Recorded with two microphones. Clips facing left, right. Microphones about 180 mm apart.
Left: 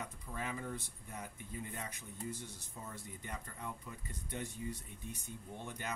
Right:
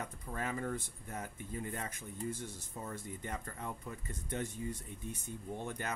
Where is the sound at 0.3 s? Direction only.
50° right (ahead or behind).